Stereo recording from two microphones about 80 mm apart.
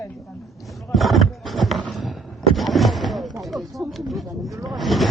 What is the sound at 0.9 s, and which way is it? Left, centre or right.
Speech, centre.